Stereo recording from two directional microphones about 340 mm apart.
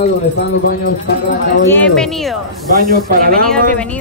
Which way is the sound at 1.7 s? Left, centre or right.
Centre.